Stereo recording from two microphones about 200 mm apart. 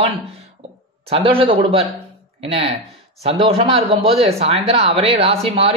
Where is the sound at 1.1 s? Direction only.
30° right (ahead or behind).